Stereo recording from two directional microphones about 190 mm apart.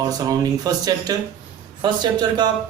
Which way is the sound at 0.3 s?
20° right (ahead or behind).